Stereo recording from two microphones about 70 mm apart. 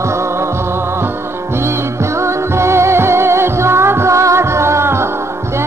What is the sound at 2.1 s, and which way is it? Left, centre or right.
Music, right.